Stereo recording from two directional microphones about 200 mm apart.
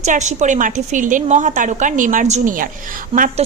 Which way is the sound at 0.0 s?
35° right (ahead or behind).